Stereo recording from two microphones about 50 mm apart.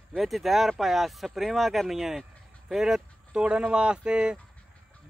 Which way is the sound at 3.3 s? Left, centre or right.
Right.